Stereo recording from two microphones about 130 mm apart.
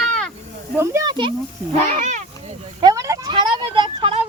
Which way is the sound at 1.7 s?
50° right (ahead or behind).